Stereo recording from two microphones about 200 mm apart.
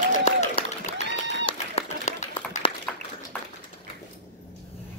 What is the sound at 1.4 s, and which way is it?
Run, 30° left (ahead or behind).